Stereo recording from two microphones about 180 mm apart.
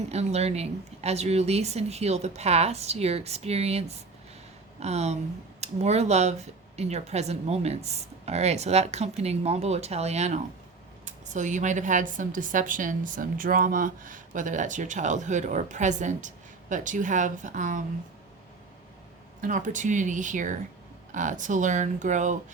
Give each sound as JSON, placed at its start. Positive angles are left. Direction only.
{"t": 0.1, "sound": "a woman's voice", "side_deg": -35}
{"t": 19.4, "sound": "a woman's voice", "side_deg": -45}